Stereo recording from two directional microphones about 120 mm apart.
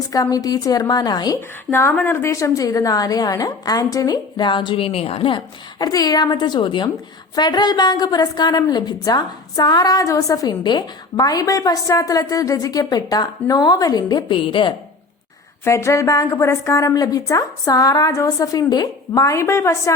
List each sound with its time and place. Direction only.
0.1 s a woman's voice: 30° left (ahead or behind)
1.4 s a woman's voice: 20° left (ahead or behind); by 5.4 s 50° left (ahead or behind)
5.8 s a woman's voice: 30° left (ahead or behind)
15.6 s a woman's voice: 25° left (ahead or behind)